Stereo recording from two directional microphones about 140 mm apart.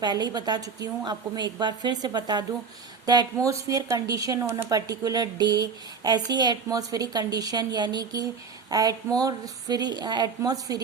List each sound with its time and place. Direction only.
0.0 s a woman's voice: 30° right (ahead or behind)